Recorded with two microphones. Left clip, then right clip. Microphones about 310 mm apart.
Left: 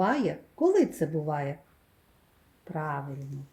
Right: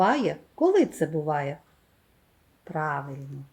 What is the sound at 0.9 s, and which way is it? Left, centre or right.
Speech, centre.